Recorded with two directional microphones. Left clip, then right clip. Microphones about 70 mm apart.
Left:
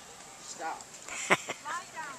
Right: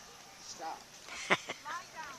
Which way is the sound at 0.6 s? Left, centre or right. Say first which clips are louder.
Left 5 dB; right.